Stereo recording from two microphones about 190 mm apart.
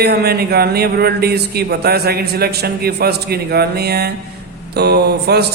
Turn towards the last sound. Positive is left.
turn(degrees=-60)  # may be behind; listen again after turning